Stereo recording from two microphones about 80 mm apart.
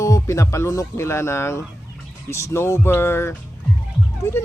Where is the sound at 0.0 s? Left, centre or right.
Left.